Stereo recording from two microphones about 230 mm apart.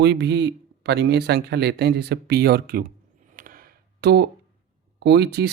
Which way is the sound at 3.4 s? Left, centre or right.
Right.